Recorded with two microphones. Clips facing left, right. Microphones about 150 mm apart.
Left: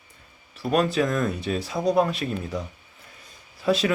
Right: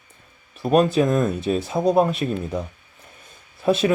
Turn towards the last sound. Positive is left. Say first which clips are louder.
# right 3 dB
turn(degrees=-20)  # may be behind; listen again after turning